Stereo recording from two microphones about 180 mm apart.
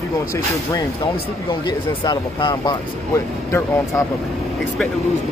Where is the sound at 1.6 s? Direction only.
25° left (ahead or behind).